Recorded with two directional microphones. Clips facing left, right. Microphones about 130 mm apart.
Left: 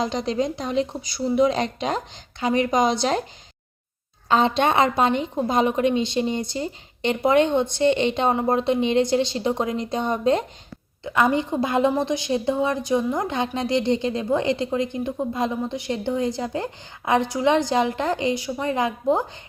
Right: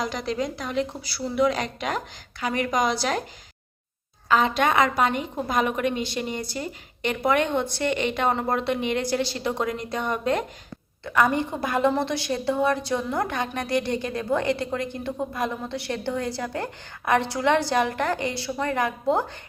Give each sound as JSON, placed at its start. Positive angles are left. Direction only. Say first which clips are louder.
{"t": 0.0, "sound": "a woman's voice", "louder": "left 4 dB", "side_deg": 25}
{"t": 4.3, "sound": "a woman's voice", "louder": "left 2 dB", "side_deg": 25}